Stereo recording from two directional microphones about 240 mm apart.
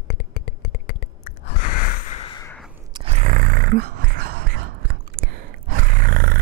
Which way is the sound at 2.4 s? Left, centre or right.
Centre.